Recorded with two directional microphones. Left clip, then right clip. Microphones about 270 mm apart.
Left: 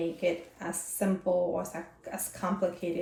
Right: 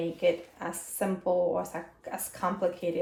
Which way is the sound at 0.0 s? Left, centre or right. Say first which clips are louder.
Right 3 dB; right.